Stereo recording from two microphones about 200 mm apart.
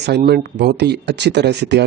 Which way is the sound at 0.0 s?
55° right (ahead or behind).